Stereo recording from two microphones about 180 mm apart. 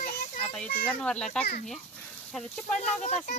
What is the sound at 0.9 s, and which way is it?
Speech, 5° left (ahead or behind).